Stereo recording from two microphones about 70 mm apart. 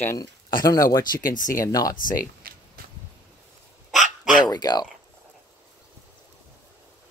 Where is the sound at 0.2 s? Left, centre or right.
Left.